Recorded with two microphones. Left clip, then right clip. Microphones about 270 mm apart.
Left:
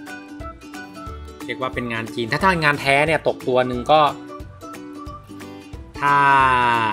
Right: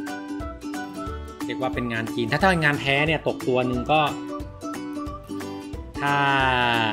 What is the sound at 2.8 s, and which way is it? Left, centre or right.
Speech, left.